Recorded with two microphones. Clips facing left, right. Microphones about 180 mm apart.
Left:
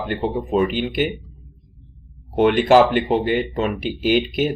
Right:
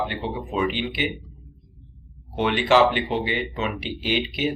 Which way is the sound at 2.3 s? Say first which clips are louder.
Left 6 dB; 50° left (ahead or behind).